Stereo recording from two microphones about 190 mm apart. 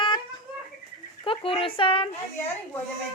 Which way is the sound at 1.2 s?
30° left (ahead or behind).